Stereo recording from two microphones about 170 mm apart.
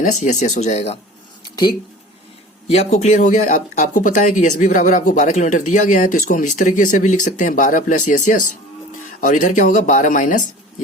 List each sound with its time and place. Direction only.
0.0 s speech: 45° left (ahead or behind)
2.6 s speech: 40° left (ahead or behind)